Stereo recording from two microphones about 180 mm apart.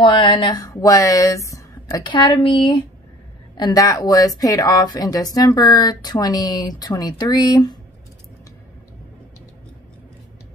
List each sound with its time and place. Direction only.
0.0 s speech: 30° left (ahead or behind)